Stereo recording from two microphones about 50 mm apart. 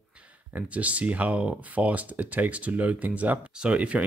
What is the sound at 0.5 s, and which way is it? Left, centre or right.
Speech, right.